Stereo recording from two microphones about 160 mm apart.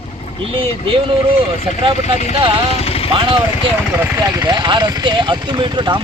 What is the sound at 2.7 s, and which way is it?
Vehicle, 40° left (ahead or behind).